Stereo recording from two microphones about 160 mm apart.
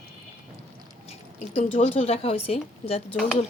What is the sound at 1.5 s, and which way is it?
A woman's voice, 40° left (ahead or behind).